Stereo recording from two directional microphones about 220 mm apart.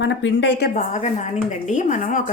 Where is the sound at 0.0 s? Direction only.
55° left (ahead or behind).